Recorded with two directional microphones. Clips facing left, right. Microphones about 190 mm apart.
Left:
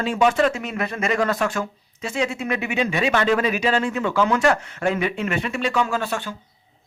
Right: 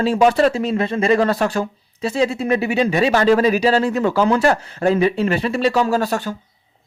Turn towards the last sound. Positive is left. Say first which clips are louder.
# right 5 dB
turn(degrees=-40)  # may be behind; listen again after turning